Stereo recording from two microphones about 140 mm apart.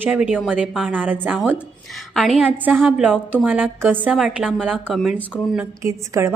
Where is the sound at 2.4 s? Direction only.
10° right (ahead or behind).